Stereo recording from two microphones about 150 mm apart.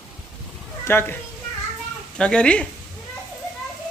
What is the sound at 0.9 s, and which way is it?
Speech, 15° left (ahead or behind).